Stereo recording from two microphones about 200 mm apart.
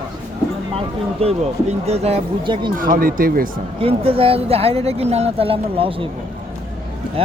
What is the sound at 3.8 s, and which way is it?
Speech, 30° right (ahead or behind).